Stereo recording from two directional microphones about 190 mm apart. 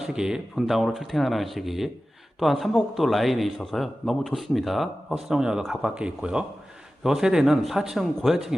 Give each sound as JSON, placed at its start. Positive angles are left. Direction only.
{"t": 0.0, "sound": "speech", "side_deg": -5}